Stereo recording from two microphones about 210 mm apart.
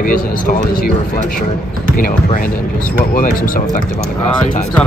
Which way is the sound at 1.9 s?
40° left (ahead or behind).